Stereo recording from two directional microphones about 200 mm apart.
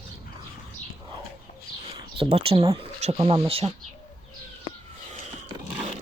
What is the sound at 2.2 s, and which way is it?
Speech, 30° right (ahead or behind).